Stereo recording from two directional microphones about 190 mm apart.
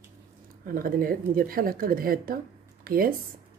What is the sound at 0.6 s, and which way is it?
A woman's voice, 50° right (ahead or behind).